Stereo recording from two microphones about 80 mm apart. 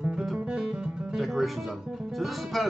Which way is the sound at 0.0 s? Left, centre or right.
Centre.